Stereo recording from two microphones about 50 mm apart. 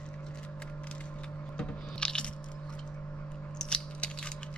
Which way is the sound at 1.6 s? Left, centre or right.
Centre.